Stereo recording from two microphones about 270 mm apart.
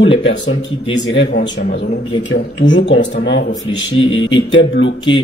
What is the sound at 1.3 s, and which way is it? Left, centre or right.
Speech, left.